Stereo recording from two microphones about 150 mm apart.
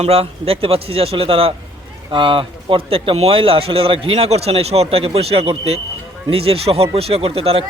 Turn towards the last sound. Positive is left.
turn(degrees=-40)  # may be behind; listen again after turning